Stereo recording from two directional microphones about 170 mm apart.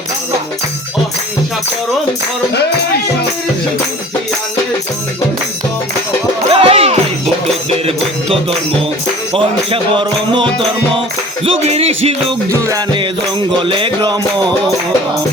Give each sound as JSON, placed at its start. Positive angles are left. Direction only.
{"t": 6.5, "sound": "music", "side_deg": -30}
{"t": 12.5, "sound": "music", "side_deg": -15}
{"t": 13.6, "sound": "music", "side_deg": -30}